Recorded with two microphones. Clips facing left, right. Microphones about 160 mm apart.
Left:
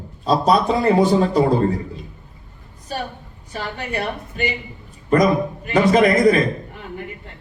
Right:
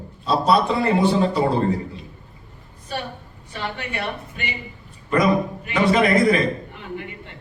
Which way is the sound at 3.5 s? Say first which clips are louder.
Left 3 dB; 40° left (ahead or behind).